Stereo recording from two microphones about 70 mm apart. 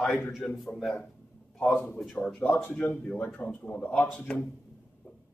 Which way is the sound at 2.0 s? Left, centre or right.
Centre.